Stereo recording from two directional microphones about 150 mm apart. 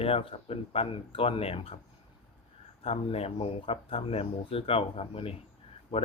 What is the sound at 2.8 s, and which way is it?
Speech, 40° left (ahead or behind).